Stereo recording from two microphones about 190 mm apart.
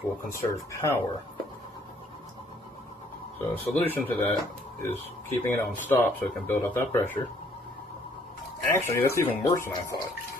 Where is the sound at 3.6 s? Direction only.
10° left (ahead or behind).